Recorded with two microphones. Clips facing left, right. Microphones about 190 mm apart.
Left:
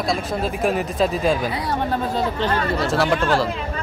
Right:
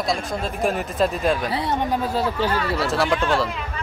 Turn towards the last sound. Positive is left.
turn(degrees=0)  # may be behind; listen again after turning